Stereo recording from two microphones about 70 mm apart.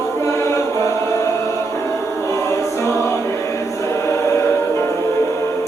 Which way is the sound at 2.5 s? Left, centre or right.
Left.